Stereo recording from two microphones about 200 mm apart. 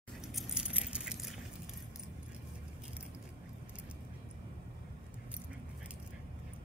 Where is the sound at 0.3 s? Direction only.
Centre (ahead or behind).